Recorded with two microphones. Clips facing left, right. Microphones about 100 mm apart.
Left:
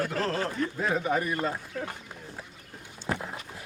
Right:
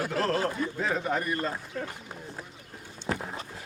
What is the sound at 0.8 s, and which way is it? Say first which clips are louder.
Speech: left 4 dB; 5° left (ahead or behind).